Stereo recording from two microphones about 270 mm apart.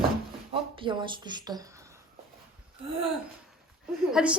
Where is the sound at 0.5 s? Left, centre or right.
Centre.